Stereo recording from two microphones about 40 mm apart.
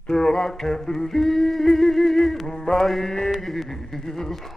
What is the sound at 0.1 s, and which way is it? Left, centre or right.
Music, centre.